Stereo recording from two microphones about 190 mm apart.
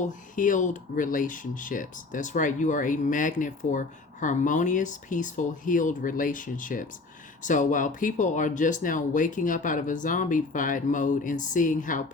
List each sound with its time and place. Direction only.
0.0 s speech: 45° left (ahead or behind)